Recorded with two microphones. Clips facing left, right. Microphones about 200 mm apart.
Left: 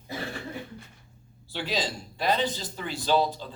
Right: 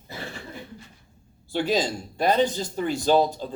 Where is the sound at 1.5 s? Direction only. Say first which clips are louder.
Right 7 dB; 50° right (ahead or behind).